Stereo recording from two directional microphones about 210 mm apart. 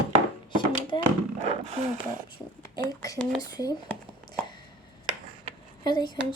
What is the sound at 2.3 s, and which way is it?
A woman's voice, 20° left (ahead or behind).